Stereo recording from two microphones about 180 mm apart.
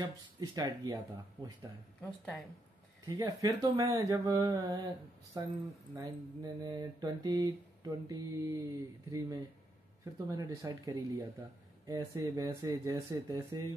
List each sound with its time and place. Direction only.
0.0 s speech: 20° right (ahead or behind)
2.0 s speech: centre (ahead or behind)
3.1 s speech: 20° right (ahead or behind)